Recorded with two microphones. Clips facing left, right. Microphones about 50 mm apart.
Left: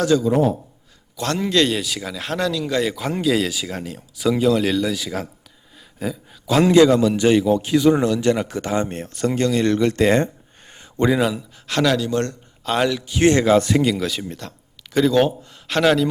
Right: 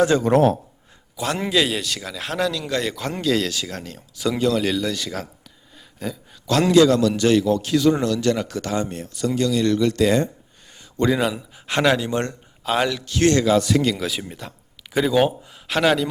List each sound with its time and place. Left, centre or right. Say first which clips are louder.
0.1 s speech: left 2 dB; right
1.1 s a man's voice: left 1 dB; centre; by 10.2 s left
10.7 s a sound: left 2 dB; left
11.1 s speech: left 2 dB; centre
11.3 s speech: left 1 dB; centre
12.6 s speech: left 1 dB; centre
13.1 s speech: left 2 dB; centre
13.4 s speech: left 2 dB; left
13.8 s speech: left 2 dB; centre